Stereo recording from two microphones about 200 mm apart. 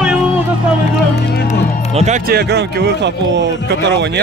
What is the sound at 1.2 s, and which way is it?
Speech, 55° left (ahead or behind).